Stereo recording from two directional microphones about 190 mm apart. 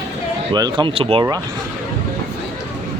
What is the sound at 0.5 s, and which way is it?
Speech, 25° right (ahead or behind).